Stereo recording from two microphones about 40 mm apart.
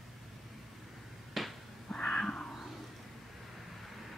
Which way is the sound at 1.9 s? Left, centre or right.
Left.